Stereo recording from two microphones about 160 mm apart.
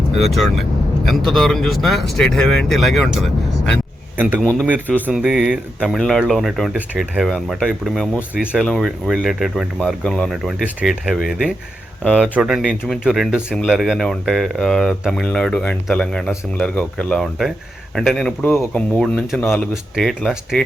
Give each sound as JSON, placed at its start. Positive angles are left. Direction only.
{"t": 0.2, "sound": "speech", "side_deg": 0}
{"t": 4.2, "sound": "speech", "side_deg": -10}
{"t": 7.3, "sound": "speech", "side_deg": 0}